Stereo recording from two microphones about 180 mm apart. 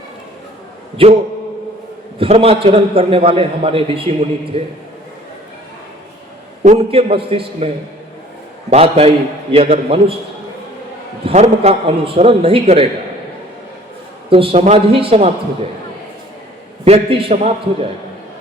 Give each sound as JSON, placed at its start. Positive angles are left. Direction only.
{"t": 1.0, "sound": "a man's voice", "side_deg": -30}
{"t": 6.7, "sound": "a man's voice", "side_deg": -35}
{"t": 8.7, "sound": "a man's voice", "side_deg": -35}
{"t": 11.3, "sound": "a man's voice", "side_deg": -35}
{"t": 14.3, "sound": "a man's voice", "side_deg": -30}
{"t": 16.8, "sound": "a man's voice", "side_deg": -35}